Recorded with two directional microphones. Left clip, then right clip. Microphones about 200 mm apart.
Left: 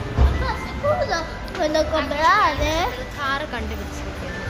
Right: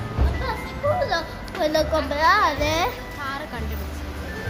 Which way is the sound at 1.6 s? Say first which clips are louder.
Left 1 dB; 30° right (ahead or behind).